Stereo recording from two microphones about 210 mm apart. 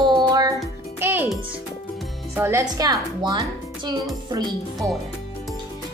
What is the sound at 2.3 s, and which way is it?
A woman's voice, 10° right (ahead or behind).